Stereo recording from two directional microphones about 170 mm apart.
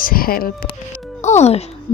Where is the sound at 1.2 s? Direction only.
40° left (ahead or behind).